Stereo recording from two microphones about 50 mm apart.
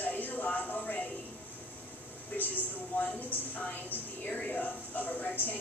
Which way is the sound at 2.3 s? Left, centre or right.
Left.